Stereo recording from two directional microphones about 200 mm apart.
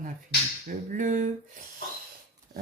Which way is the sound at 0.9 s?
40° right (ahead or behind).